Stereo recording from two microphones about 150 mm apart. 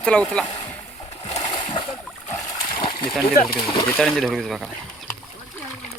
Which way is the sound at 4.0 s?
5° left (ahead or behind).